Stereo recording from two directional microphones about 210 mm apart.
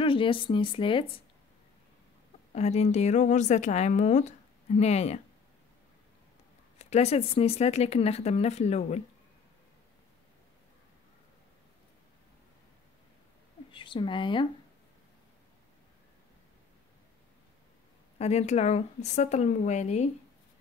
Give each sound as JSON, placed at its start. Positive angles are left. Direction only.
{"t": 0.0, "sound": "speech", "side_deg": 25}
{"t": 2.5, "sound": "speech", "side_deg": 30}
{"t": 6.8, "sound": "speech", "side_deg": 30}
{"t": 13.7, "sound": "speech", "side_deg": 25}
{"t": 18.1, "sound": "speech", "side_deg": 30}